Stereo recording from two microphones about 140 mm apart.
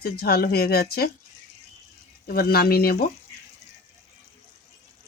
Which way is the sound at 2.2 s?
90° left.